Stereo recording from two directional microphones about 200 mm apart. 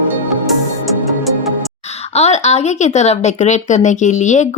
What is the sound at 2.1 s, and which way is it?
Speech, 35° left (ahead or behind).